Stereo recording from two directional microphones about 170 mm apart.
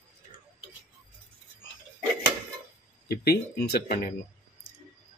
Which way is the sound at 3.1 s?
65° left (ahead or behind).